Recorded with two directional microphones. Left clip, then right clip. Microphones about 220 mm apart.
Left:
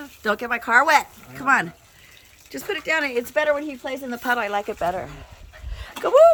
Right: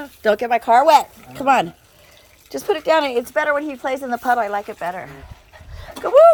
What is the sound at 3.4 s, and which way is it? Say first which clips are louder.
Speech: right 3 dB; centre (ahead or behind).